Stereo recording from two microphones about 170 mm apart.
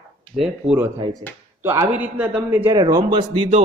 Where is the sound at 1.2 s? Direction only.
35° right (ahead or behind).